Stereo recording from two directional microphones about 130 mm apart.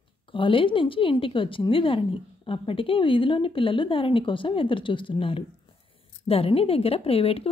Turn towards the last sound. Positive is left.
turn(degrees=50)  # may be behind; listen again after turning